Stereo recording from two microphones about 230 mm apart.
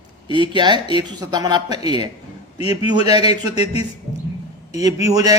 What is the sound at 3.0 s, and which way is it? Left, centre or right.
Speech, centre.